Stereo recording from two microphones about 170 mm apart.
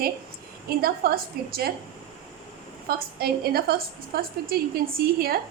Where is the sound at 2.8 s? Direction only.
65° right (ahead or behind).